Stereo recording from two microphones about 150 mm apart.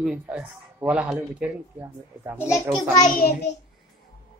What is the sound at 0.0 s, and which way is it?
Speech, 5° right (ahead or behind).